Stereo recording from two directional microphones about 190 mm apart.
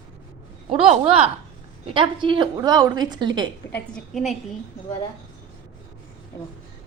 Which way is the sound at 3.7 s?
5° left (ahead or behind).